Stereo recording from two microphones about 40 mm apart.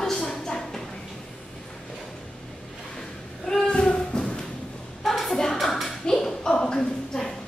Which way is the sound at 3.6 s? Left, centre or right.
Left.